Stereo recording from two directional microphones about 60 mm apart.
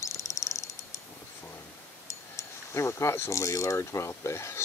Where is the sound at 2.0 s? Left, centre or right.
Left.